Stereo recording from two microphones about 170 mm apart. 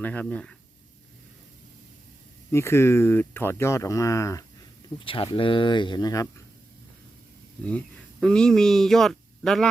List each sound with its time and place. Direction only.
0.0 s speech: 10° left (ahead or behind)
2.5 s speech: 15° left (ahead or behind)
4.9 s speech: 30° left (ahead or behind)
8.2 s speech: 5° left (ahead or behind)